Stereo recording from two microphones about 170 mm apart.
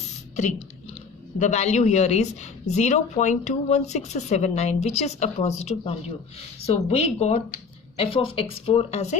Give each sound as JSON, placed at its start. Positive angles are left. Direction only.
{"t": 1.4, "sound": "speech", "side_deg": 40}